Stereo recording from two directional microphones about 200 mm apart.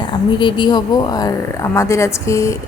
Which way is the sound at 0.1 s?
25° left (ahead or behind).